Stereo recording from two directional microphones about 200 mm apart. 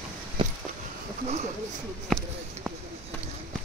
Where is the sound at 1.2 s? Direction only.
35° right (ahead or behind).